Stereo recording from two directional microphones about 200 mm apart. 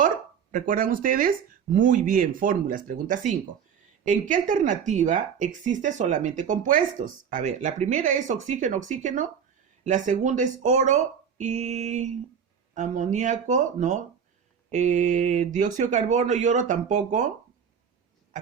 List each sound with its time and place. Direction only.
0.5 s speech: 40° right (ahead or behind)